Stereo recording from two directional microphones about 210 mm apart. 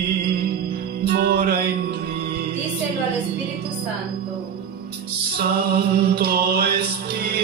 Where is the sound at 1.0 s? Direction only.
45° right (ahead or behind).